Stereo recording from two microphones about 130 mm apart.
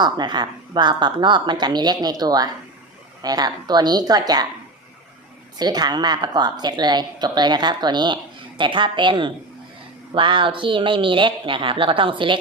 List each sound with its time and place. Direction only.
0.0 s speech: 35° right (ahead or behind)
5.5 s speech: 30° right (ahead or behind)